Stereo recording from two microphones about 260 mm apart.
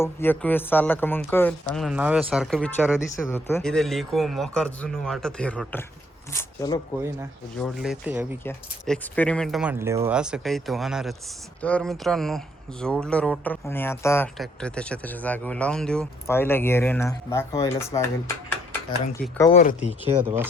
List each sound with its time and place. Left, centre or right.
0.0 s speech: centre
7.6 s speech: centre
8.4 s speech: centre
19.4 s speech: left
20.1 s speech: centre